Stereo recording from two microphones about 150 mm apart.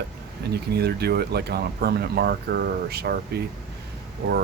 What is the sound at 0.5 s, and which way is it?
Speech, 90° right.